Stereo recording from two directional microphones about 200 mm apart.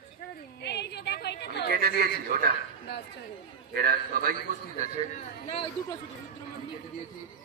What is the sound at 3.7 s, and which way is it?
Speech, 50° right (ahead or behind).